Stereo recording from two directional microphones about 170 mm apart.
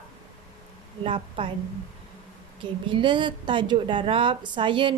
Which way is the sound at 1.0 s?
30° right (ahead or behind).